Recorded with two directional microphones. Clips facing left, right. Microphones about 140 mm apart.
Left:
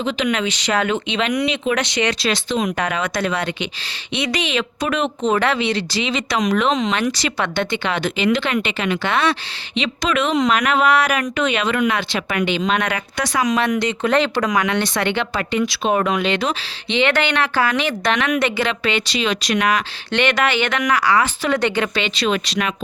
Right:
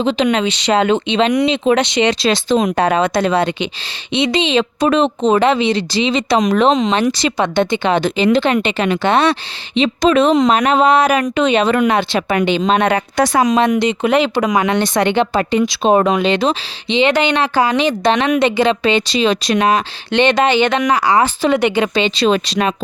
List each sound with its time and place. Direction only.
0.0 s speech: 30° right (ahead or behind)
11.6 s a woman's voice: 35° right (ahead or behind)